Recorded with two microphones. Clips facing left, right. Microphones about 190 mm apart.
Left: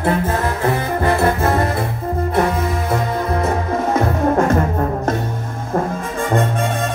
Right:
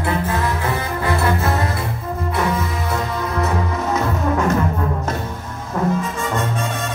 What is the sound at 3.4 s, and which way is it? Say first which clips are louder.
Music: left 3 dB; 50° left (ahead or behind).